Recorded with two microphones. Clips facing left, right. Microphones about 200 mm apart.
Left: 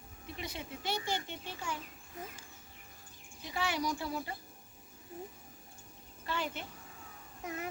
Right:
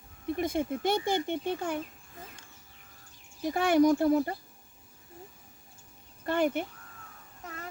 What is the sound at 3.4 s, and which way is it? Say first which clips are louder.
Speech: right 13 dB; 50° right (ahead or behind).